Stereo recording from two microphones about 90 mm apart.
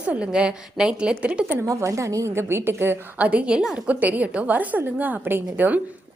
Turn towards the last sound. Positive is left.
turn(degrees=-20)  # may be behind; listen again after turning